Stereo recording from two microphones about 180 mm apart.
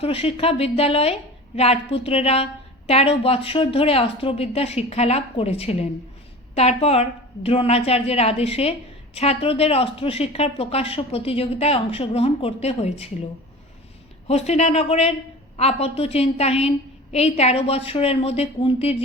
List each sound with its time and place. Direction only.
0.0 s a woman's voice: 35° left (ahead or behind)
14.3 s a woman's voice: 35° left (ahead or behind)